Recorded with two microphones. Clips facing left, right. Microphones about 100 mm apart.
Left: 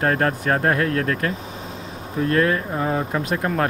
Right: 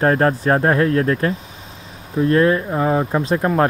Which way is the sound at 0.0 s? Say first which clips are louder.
Right 5 dB; 30° right (ahead or behind).